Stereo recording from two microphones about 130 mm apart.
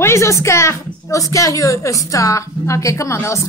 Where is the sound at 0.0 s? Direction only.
20° left (ahead or behind).